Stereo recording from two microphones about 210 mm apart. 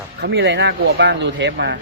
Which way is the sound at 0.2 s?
55° right (ahead or behind).